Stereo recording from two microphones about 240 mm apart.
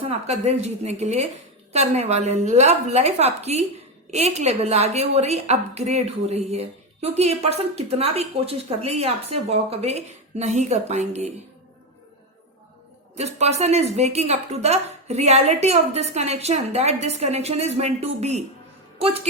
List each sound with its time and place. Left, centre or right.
0.3 s a woman's voice: right
13.1 s a woman's voice: right